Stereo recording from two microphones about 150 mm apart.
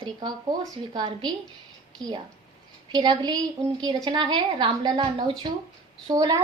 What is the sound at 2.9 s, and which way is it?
A woman's voice, 30° right (ahead or behind).